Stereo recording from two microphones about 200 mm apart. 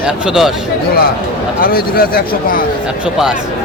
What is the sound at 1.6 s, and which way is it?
Speech, 50° left (ahead or behind).